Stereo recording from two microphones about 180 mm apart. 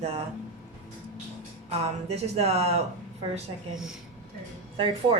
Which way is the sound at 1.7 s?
35° right (ahead or behind).